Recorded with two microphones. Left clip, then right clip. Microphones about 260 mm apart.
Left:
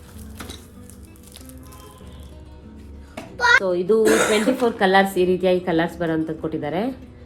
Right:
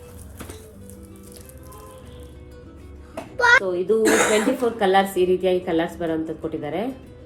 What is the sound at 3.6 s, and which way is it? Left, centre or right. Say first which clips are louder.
A woman's voice: left 2 dB; left.